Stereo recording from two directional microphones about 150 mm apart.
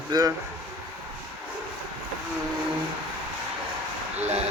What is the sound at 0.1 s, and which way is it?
Speech, 25° right (ahead or behind).